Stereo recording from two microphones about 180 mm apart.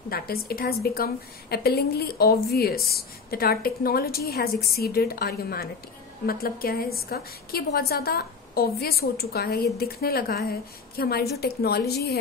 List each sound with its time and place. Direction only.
0.1 s a woman's voice: 55° left (ahead or behind)